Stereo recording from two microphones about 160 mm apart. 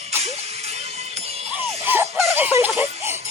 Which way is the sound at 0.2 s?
40° right (ahead or behind).